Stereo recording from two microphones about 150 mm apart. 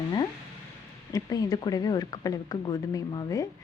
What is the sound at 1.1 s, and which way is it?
Speech, 25° left (ahead or behind).